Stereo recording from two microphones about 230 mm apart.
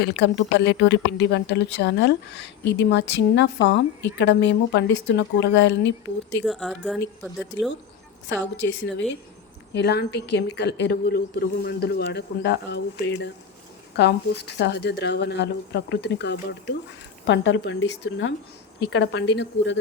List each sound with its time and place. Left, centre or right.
0.2 s a woman's voice: left
6.4 s a woman's voice: centre
8.3 s a woman's voice: left